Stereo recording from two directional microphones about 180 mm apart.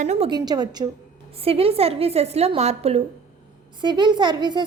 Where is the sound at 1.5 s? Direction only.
35° right (ahead or behind).